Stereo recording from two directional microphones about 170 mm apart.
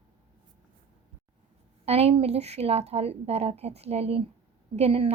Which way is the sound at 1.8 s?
35° right (ahead or behind).